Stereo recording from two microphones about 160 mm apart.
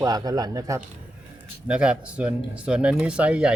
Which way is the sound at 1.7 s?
5° right (ahead or behind).